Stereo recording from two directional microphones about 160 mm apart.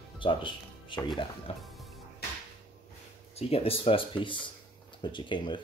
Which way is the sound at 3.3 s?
35° left (ahead or behind).